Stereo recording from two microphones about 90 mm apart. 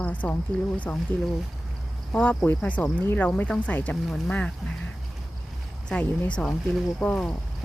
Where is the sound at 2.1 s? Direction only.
15° left (ahead or behind).